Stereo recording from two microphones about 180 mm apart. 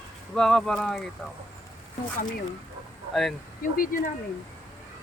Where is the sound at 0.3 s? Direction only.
5° left (ahead or behind).